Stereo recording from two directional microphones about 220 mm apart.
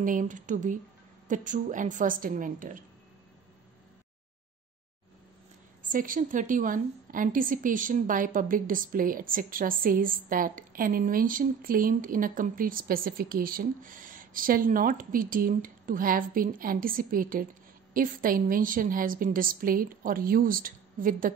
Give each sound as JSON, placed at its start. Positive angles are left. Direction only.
{"t": 0.0, "sound": "a woman's voice", "side_deg": -35}
{"t": 5.8, "sound": "a woman's voice", "side_deg": -40}